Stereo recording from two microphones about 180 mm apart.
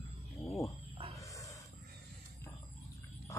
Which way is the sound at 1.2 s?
15° left (ahead or behind).